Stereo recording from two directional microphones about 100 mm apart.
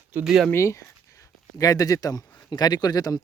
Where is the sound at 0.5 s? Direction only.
30° left (ahead or behind).